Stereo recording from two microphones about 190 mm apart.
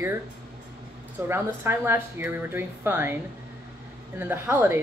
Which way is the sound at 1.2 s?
10° right (ahead or behind).